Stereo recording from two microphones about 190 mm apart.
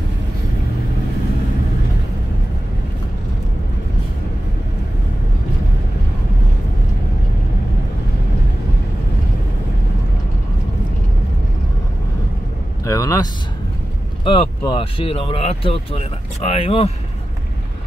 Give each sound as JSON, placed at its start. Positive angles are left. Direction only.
{"t": 12.8, "sound": "vehicle", "side_deg": 15}
{"t": 14.2, "sound": "speech", "side_deg": 30}